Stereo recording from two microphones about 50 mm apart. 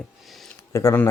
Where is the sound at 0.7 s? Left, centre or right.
Left.